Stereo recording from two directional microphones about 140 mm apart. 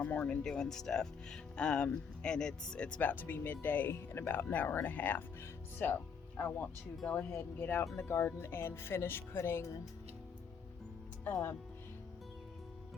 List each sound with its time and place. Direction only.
0.0 s speech: 10° left (ahead or behind)